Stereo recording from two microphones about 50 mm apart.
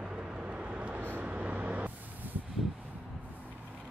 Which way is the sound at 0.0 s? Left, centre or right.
Right.